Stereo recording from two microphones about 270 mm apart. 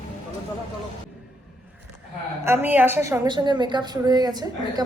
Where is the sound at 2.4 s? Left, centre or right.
Centre.